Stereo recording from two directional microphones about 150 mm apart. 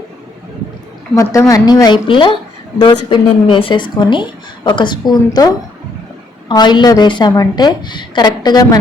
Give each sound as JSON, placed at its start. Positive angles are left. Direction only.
{"t": 1.1, "sound": "a woman's voice", "side_deg": 20}